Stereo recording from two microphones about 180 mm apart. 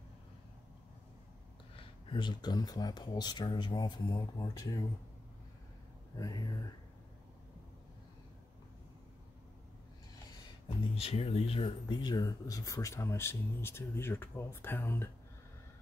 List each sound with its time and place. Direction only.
1.8 s speech: 25° left (ahead or behind)
6.1 s speech: 20° left (ahead or behind)
11.0 s speech: 35° left (ahead or behind); by 15.0 s 10° left (ahead or behind)